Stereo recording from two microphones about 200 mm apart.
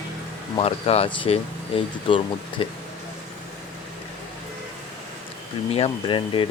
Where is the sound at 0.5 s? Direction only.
30° left (ahead or behind).